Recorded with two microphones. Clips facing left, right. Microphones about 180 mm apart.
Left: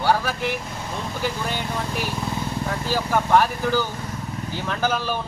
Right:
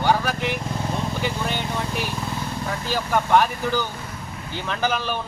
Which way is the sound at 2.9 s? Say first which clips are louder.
Even; 5° left (ahead or behind).